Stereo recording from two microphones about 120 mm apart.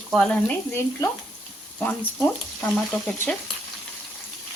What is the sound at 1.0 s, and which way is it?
Speech, 25° left (ahead or behind).